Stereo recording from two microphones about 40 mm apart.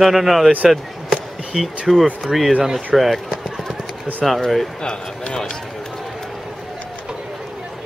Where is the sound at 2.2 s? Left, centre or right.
Centre.